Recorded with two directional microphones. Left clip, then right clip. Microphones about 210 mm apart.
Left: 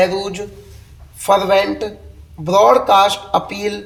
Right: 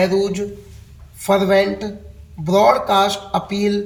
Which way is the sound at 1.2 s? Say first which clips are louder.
Left 2 dB; 30° left (ahead or behind).